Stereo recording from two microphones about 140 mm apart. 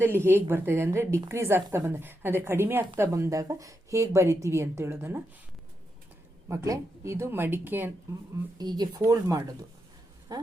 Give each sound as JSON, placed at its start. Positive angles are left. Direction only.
{"t": 0.0, "sound": "a woman's voice", "side_deg": -15}
{"t": 6.5, "sound": "speech", "side_deg": -20}
{"t": 8.5, "sound": "a woman's voice", "side_deg": -30}